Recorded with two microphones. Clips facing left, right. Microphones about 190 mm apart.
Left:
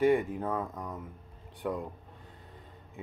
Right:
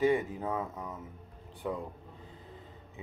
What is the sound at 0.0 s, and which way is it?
Speech, 5° right (ahead or behind).